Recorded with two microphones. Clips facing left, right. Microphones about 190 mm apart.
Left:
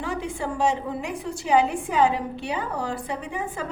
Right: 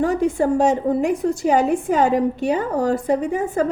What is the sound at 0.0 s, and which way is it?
A woman's voice, 45° right (ahead or behind).